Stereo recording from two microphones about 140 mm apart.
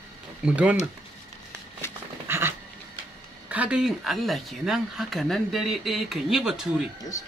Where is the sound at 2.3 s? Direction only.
15° right (ahead or behind).